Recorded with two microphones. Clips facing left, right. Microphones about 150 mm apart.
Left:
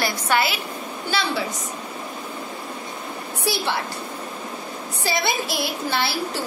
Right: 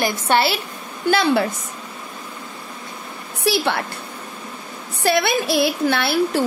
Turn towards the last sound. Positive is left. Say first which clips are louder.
# right 6 dB
turn(degrees=-60)  # may be behind; listen again after turning